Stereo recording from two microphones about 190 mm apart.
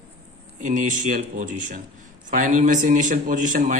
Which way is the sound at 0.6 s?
45° right (ahead or behind).